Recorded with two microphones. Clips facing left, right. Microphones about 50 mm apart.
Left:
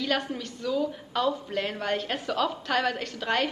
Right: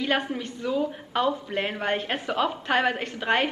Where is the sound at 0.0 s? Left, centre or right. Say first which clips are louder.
Right 3 dB; right.